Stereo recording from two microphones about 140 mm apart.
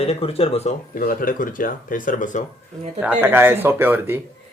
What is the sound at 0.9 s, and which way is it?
Speech, 85° left.